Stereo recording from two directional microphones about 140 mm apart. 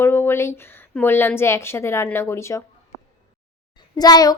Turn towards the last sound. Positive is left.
turn(degrees=30)  # may be behind; listen again after turning